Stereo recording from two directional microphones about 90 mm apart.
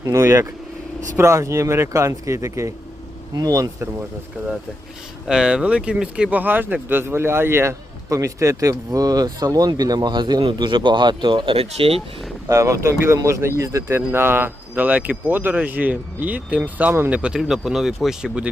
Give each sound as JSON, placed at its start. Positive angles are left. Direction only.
{"t": 0.0, "sound": "speech", "side_deg": -35}
{"t": 5.3, "sound": "a man's voice", "side_deg": -10}
{"t": 12.5, "sound": "speech", "side_deg": -35}
{"t": 13.9, "sound": "speech", "side_deg": -25}
{"t": 17.2, "sound": "speech", "side_deg": -5}